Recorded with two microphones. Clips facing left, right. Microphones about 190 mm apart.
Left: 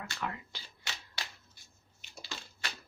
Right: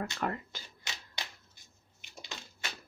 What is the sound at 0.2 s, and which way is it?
Speech, 45° right (ahead or behind).